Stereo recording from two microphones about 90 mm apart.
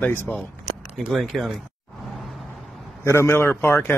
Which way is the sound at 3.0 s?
30° left (ahead or behind).